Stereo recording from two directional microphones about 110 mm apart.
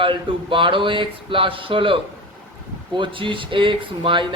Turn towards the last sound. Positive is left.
turn(degrees=-50)  # may be behind; listen again after turning